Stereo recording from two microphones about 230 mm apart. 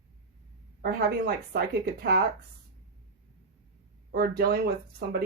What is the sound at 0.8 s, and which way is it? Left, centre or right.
Speech, right.